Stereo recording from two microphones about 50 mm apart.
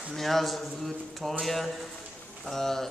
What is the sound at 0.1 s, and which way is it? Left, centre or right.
A man's voice, centre.